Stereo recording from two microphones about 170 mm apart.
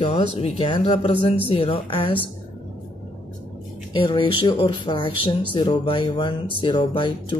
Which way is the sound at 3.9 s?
30° left (ahead or behind).